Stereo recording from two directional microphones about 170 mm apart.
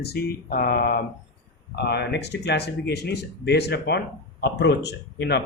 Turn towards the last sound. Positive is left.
turn(degrees=80)